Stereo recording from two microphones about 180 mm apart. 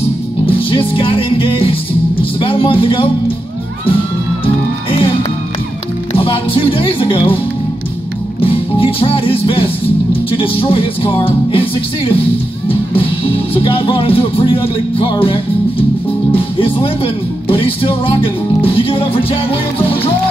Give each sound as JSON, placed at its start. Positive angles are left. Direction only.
{"t": 0.5, "sound": "music", "side_deg": 30}
{"t": 2.4, "sound": "speech", "side_deg": 30}
{"t": 6.1, "sound": "speech", "side_deg": 30}
{"t": 8.4, "sound": "music", "side_deg": 30}
{"t": 12.9, "sound": "speech", "side_deg": 30}
{"t": 16.3, "sound": "music", "side_deg": 30}